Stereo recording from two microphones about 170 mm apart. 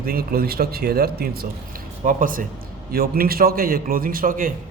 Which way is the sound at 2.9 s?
65° right (ahead or behind).